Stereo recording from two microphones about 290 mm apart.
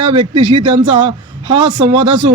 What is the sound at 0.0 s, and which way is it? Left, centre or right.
A man's voice, centre.